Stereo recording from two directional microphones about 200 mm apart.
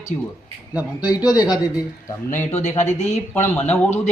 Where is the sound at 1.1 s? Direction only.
20° left (ahead or behind).